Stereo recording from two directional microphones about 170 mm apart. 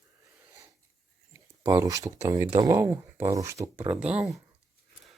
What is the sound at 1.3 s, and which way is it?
Speech, 20° right (ahead or behind).